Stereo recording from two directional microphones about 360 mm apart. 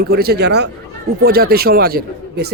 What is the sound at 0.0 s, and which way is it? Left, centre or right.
Speech, right.